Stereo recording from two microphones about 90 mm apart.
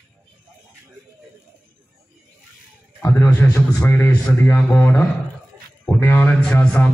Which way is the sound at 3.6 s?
15° left (ahead or behind).